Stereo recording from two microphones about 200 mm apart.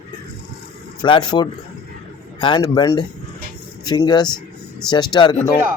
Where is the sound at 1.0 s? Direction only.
20° left (ahead or behind).